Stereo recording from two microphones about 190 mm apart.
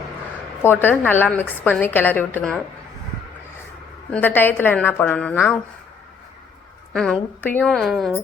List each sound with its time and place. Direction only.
0.6 s a woman's voice: 10° left (ahead or behind)
4.1 s a woman's voice: 10° left (ahead or behind)
6.9 s a woman's voice: 5° left (ahead or behind)